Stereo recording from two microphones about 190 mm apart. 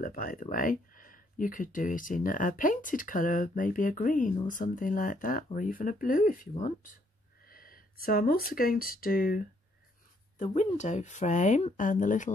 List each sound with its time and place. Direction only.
0.0 s speech: 50° left (ahead or behind)
10.4 s speech: 40° left (ahead or behind)